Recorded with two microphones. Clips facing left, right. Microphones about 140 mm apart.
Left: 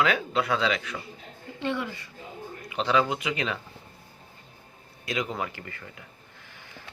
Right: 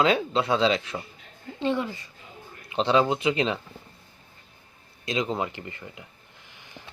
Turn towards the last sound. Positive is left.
turn(degrees=-15)  # may be behind; listen again after turning